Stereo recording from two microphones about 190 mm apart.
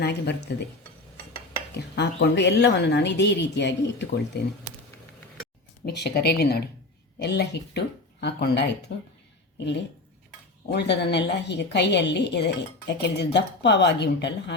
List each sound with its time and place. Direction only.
0.0 s a woman's voice: 60° left (ahead or behind)
2.0 s a woman's voice: 65° left (ahead or behind)
5.8 s a woman's voice: 60° left (ahead or behind)
10.7 s a woman's voice: 65° left (ahead or behind)